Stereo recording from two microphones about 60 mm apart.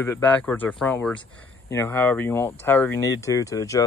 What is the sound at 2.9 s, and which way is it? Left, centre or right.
Speech, left.